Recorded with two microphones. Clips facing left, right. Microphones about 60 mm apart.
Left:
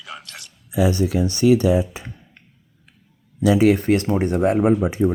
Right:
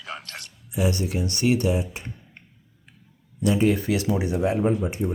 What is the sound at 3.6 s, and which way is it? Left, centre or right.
Speech, left.